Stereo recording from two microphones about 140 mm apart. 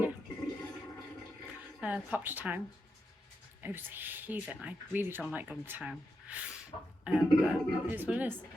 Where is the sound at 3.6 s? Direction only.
15° right (ahead or behind).